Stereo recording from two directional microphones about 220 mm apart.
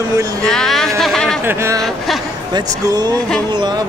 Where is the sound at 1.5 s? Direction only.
10° right (ahead or behind).